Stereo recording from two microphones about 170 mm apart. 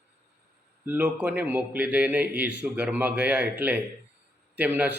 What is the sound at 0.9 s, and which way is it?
A man's voice, 10° right (ahead or behind).